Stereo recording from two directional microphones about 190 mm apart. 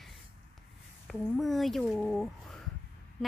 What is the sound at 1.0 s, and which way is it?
Speech, centre (ahead or behind).